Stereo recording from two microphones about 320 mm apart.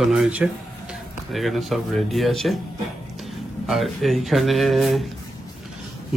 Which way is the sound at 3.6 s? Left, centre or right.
Centre.